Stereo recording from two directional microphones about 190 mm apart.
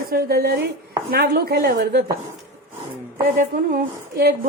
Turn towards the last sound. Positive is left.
turn(degrees=-50)  # may be behind; listen again after turning